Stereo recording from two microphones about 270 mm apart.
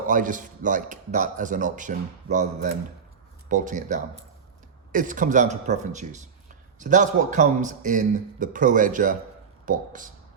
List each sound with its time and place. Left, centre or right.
0.1 s a man's voice: right